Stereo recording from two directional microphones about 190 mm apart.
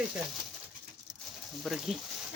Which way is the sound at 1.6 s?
Centre (ahead or behind).